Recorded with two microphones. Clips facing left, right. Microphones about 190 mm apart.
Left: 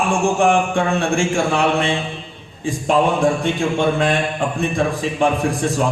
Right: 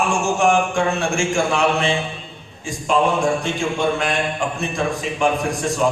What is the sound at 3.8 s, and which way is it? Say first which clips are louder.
A man's voice: left 3 dB; 30° left (ahead or behind).